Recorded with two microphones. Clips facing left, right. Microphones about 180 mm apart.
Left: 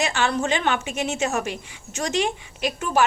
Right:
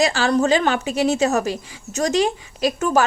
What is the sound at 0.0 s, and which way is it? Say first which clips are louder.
A woman's voice: right 6 dB; 35° right (ahead or behind).